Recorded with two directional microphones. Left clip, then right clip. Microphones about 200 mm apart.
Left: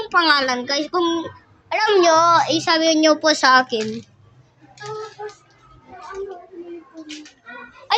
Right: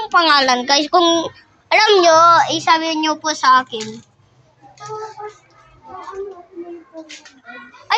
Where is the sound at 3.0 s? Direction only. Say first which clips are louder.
Left 3 dB; 35° left (ahead or behind).